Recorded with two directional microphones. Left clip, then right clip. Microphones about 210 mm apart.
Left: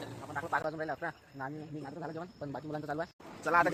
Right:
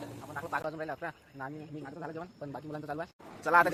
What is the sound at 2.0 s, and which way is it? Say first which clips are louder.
Speech: right 1 dB; 15° left (ahead or behind).